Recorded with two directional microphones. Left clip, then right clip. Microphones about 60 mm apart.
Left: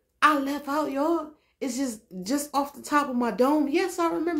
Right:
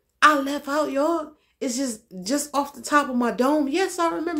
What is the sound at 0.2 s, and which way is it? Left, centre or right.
A woman's voice, right.